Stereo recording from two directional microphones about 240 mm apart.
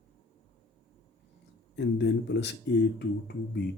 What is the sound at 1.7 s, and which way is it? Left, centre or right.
Speech, left.